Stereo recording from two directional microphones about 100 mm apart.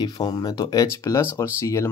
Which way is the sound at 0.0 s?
45° left (ahead or behind).